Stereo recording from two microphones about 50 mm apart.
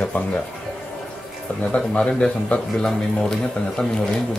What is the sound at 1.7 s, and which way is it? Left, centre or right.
Speech, centre.